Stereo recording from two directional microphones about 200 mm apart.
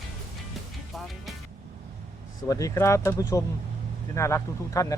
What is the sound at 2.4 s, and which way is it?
A man's voice, 15° left (ahead or behind).